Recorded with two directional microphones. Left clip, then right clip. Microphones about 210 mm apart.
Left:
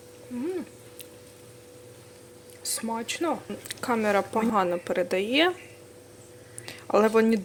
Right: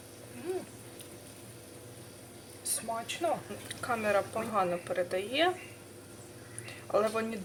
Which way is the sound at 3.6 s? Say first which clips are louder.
Left 6 dB; 35° left (ahead or behind).